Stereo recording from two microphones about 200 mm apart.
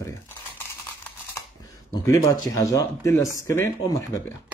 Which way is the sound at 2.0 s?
15° left (ahead or behind).